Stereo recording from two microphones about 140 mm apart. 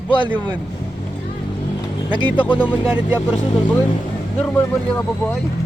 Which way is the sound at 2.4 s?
35° left (ahead or behind).